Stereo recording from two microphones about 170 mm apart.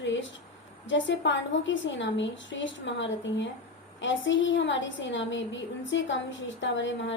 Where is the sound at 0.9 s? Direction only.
90° left.